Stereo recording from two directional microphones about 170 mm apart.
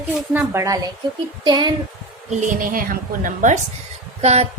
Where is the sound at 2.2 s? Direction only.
50° right (ahead or behind).